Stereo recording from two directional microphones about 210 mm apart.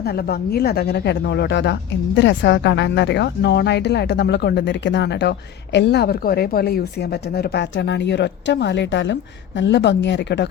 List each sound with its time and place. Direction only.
0.0 s speech: 50° left (ahead or behind)